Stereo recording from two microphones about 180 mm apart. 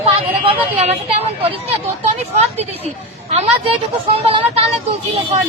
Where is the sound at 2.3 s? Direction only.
35° right (ahead or behind).